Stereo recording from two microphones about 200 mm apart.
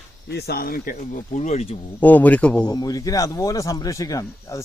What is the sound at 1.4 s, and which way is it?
Speech, 35° left (ahead or behind).